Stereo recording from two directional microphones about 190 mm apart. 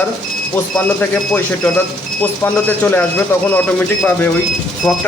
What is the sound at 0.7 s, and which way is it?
Speech, 5° left (ahead or behind).